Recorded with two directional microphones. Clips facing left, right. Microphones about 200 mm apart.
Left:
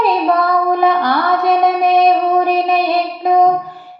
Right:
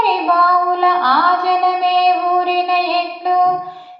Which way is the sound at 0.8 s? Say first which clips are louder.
Left 2 dB; 20° left (ahead or behind).